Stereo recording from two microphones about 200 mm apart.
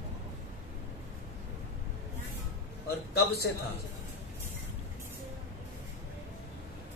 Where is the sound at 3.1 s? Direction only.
50° left (ahead or behind).